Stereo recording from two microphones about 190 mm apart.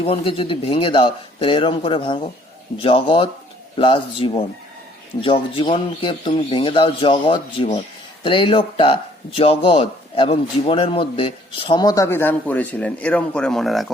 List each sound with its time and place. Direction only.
0.0 s speech: 30° left (ahead or behind); by 13.9 s centre (ahead or behind)